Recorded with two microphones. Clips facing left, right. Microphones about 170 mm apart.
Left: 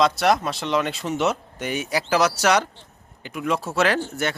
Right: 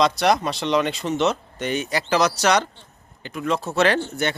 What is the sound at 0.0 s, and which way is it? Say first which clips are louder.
Speech: even; centre (ahead or behind).